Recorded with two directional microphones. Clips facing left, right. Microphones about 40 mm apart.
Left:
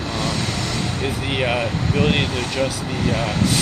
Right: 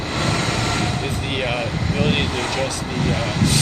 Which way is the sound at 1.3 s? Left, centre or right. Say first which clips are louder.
Left 3 dB; centre.